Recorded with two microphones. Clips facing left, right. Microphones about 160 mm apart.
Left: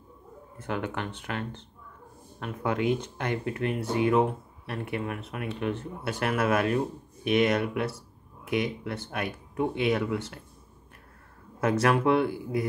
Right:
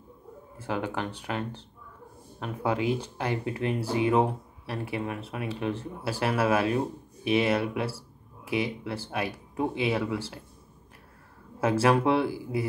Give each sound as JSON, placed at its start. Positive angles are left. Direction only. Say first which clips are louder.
{"t": 0.6, "sound": "speech", "louder": "right 1 dB", "side_deg": -30}
{"t": 2.4, "sound": "speech", "louder": "even", "side_deg": -30}
{"t": 11.6, "sound": "speech", "louder": "right 1 dB", "side_deg": -30}